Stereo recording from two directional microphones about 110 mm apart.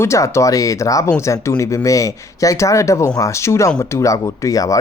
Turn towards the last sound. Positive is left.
turn(degrees=30)  # may be behind; listen again after turning